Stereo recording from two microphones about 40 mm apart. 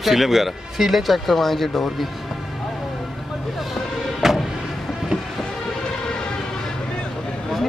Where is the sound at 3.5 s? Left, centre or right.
Centre.